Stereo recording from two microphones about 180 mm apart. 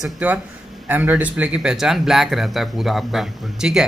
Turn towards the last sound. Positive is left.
turn(degrees=0)  # may be behind; listen again after turning